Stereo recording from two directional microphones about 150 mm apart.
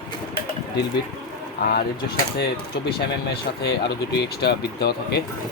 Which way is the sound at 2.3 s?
90° left.